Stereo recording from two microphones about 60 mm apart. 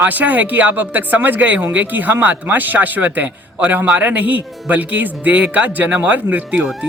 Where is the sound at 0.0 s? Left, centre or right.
Right.